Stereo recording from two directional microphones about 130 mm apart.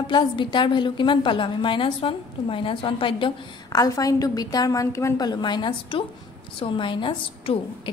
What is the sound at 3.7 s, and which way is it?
A woman's voice, 25° left (ahead or behind).